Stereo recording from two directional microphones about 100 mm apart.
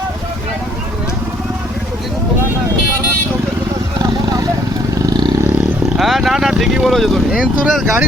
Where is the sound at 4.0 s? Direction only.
40° right (ahead or behind).